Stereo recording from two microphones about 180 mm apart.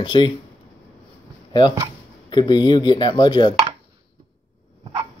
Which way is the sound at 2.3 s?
25° left (ahead or behind).